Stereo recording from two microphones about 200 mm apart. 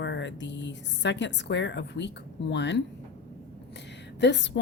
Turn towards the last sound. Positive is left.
turn(degrees=60)  # may be behind; listen again after turning